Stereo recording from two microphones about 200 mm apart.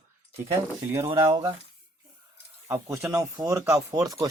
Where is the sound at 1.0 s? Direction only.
25° right (ahead or behind).